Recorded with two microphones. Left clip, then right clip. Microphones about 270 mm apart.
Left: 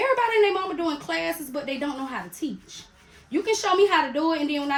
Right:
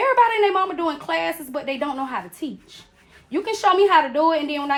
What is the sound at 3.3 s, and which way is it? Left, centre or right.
A woman's voice, centre.